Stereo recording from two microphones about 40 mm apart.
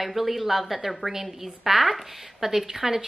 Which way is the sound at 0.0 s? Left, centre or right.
Centre.